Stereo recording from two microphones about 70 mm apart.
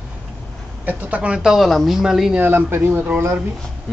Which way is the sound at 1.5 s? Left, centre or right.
Centre.